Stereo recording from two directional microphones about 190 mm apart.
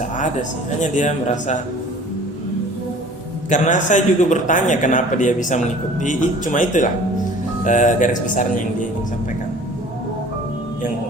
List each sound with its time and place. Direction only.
0.8 s a man's voice: 40° left (ahead or behind)
3.5 s a man's voice: 40° left (ahead or behind)